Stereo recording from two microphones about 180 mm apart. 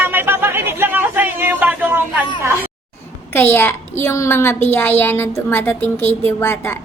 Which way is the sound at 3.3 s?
15° left (ahead or behind).